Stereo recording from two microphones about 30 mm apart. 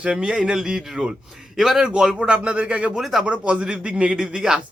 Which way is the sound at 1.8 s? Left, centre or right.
Right.